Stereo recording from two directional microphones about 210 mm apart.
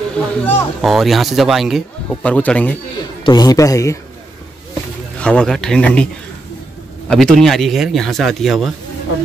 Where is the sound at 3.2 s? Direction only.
20° left (ahead or behind).